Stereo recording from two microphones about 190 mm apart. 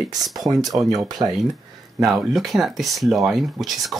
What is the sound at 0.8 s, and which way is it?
Speech, 5° right (ahead or behind).